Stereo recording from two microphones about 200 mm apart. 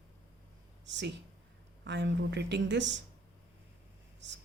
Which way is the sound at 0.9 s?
65° right (ahead or behind).